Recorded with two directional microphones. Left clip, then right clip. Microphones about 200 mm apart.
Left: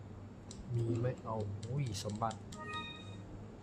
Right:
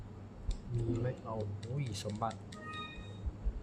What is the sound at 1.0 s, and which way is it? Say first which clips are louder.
Speech: even; 5° left (ahead or behind).